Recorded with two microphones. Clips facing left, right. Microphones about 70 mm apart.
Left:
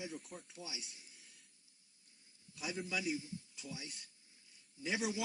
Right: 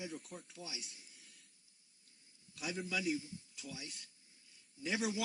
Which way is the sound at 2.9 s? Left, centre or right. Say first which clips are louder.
Right 2 dB; left.